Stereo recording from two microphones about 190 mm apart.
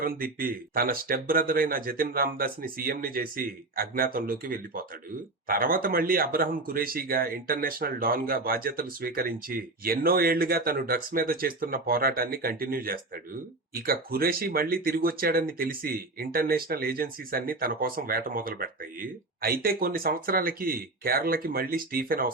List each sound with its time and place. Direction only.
0.0 s speech: 50° right (ahead or behind)